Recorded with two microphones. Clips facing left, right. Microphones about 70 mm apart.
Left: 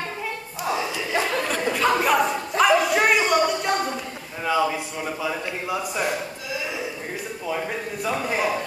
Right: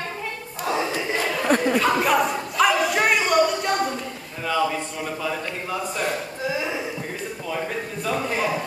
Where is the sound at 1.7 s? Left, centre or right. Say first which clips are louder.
Even; centre.